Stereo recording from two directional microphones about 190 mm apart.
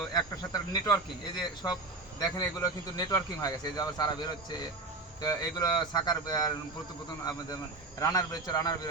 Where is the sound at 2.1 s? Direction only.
20° left (ahead or behind).